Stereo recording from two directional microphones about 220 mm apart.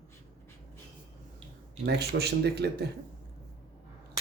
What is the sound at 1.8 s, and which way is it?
Speech, 45° right (ahead or behind).